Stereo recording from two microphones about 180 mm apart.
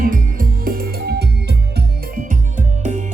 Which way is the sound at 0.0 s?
50° right (ahead or behind).